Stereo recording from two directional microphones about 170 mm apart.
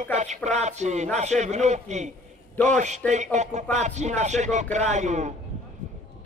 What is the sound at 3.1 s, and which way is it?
Speech, 45° right (ahead or behind).